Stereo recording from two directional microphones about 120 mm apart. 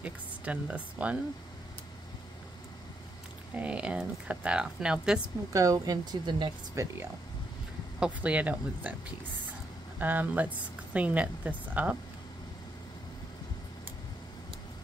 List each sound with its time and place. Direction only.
0.0 s speech: 10° right (ahead or behind)
3.5 s speech: 10° right (ahead or behind)
5.5 s speech: 30° right (ahead or behind)
6.7 s speech: 25° right (ahead or behind)
8.0 s speech: 10° right (ahead or behind)
9.9 s speech: 15° right (ahead or behind)